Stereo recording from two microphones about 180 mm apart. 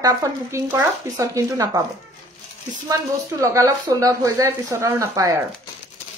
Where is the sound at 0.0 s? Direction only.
20° right (ahead or behind).